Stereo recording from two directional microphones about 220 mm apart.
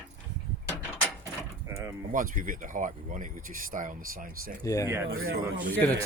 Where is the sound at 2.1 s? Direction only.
40° right (ahead or behind).